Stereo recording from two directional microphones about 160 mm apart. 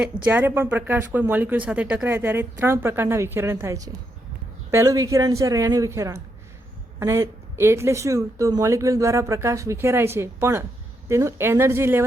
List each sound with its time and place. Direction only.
0.3 s a woman's voice: 10° right (ahead or behind)